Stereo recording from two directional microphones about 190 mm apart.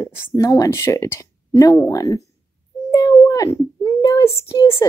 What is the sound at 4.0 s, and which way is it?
Child singing, 15° left (ahead or behind).